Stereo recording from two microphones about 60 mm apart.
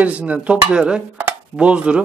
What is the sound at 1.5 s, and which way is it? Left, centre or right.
Dishes, centre.